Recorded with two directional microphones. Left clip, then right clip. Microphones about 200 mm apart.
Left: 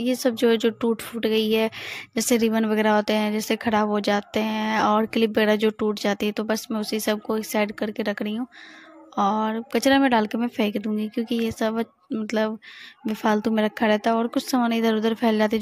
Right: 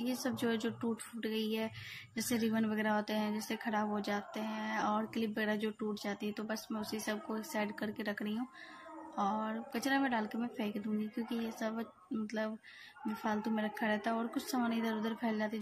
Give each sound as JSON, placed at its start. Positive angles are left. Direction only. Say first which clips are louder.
{"t": 0.0, "sound": "speech", "louder": "left 16 dB", "side_deg": 45}